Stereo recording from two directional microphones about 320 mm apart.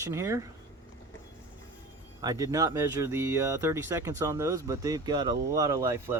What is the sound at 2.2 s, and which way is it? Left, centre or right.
Speech, centre.